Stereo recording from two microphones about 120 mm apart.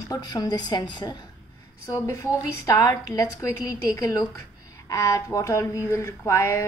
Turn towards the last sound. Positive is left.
turn(degrees=25)  # may be behind; listen again after turning